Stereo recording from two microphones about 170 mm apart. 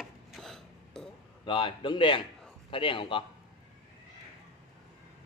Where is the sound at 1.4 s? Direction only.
30° left (ahead or behind).